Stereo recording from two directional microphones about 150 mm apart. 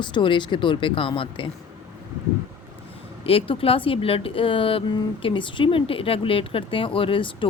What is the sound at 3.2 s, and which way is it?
Speech, 40° left (ahead or behind).